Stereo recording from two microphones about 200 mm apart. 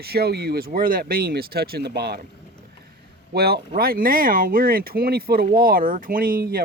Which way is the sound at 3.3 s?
50° right (ahead or behind).